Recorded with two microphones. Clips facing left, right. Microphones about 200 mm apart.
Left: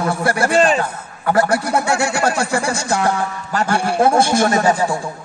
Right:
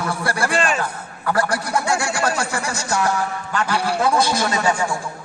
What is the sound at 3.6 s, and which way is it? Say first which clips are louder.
A man's voice: left 5 dB; 50° left (ahead or behind).